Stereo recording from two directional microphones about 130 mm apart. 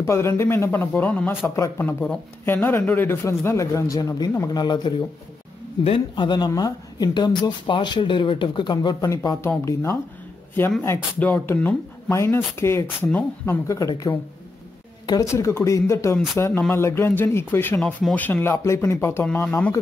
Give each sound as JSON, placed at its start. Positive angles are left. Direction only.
{"t": 0.0, "sound": "speech", "side_deg": 20}